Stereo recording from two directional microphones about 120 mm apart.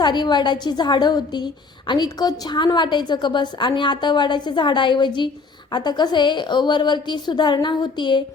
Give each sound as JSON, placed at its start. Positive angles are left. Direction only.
{"t": 0.0, "sound": "a woman's voice", "side_deg": 35}